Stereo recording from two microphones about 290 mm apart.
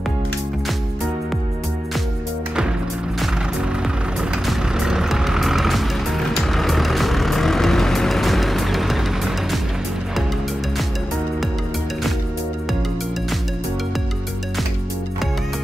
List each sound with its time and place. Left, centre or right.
4.5 s vehicle: centre